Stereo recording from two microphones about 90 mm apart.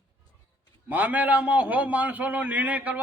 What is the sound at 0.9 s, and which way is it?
A man's voice, 20° right (ahead or behind).